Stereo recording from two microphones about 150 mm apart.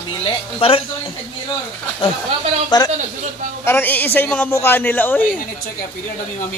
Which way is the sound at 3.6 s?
15° left (ahead or behind).